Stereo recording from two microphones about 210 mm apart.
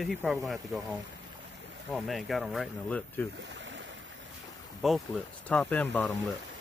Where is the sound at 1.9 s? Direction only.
Centre (ahead or behind).